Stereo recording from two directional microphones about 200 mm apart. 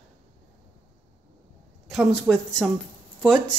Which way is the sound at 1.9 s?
Centre (ahead or behind).